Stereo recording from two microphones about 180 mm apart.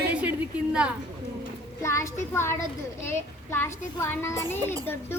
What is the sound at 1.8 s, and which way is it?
A child's voice, 15° left (ahead or behind).